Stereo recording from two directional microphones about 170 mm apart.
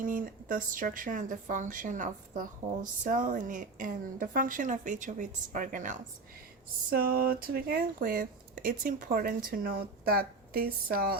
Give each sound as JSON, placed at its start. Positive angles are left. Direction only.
{"t": 0.0, "sound": "a woman's voice", "side_deg": -50}
{"t": 6.9, "sound": "speech", "side_deg": -65}